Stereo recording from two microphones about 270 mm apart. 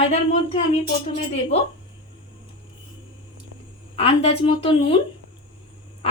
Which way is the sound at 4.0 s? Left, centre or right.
Left.